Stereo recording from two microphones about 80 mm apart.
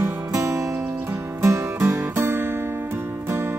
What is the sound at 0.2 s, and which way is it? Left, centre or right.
Music, right.